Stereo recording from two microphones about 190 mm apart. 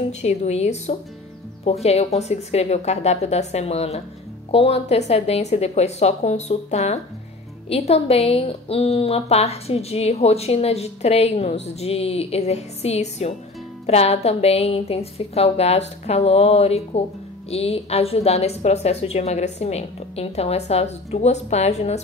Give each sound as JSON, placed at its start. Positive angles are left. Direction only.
{"t": 0.2, "sound": "a woman's voice", "side_deg": 35}